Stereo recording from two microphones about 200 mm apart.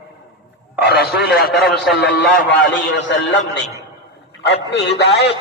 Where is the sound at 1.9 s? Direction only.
55° left (ahead or behind).